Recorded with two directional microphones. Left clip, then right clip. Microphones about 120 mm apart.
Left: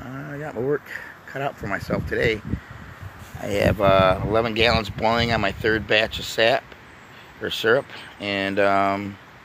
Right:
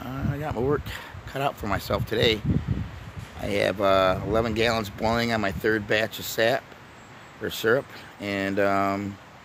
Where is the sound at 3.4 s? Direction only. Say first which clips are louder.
Left 3 dB; 10° right (ahead or behind).